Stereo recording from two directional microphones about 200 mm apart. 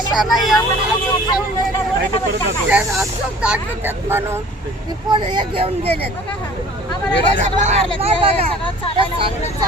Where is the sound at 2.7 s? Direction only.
5° right (ahead or behind).